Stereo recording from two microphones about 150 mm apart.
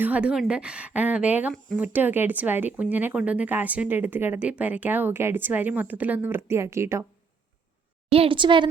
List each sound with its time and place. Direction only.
0.0 s speech: 10° right (ahead or behind)
8.1 s a woman's voice: 35° right (ahead or behind)